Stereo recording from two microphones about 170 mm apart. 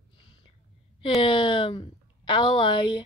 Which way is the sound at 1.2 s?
30° left (ahead or behind).